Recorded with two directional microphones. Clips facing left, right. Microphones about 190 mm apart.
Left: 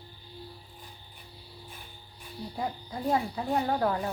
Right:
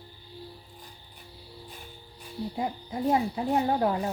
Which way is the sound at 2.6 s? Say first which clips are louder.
Right 2 dB; 20° right (ahead or behind).